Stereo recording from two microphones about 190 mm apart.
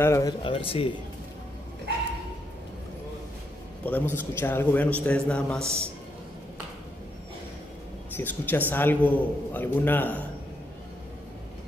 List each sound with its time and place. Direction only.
0.0 s a man's voice: 15° left (ahead or behind)
0.4 s speech: 30° left (ahead or behind)
3.8 s a man's voice: 10° left (ahead or behind)
8.2 s a man's voice: 10° left (ahead or behind)